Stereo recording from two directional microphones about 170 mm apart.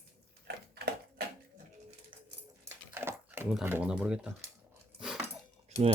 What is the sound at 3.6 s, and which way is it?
Speech, 10° right (ahead or behind).